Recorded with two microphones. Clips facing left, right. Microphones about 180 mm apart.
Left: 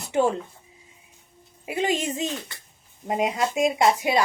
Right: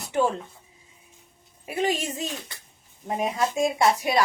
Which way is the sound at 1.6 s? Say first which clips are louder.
Left 1 dB; 20° left (ahead or behind).